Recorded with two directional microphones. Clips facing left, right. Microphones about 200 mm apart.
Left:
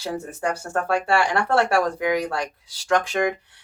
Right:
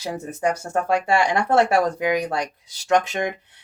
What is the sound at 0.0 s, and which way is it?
Speech, 20° right (ahead or behind).